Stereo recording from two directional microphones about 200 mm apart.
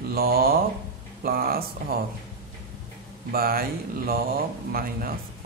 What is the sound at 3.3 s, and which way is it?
Speech, 45° right (ahead or behind).